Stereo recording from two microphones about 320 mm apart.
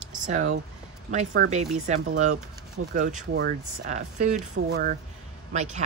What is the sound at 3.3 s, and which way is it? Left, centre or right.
A woman's voice, right.